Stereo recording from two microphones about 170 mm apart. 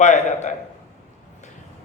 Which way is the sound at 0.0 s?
45° left (ahead or behind).